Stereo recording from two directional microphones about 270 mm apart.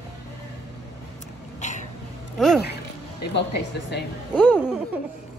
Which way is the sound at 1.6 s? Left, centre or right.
Left.